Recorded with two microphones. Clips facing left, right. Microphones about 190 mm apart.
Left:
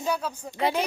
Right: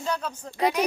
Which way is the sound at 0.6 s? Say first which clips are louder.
Right 2 dB; 30° left (ahead or behind).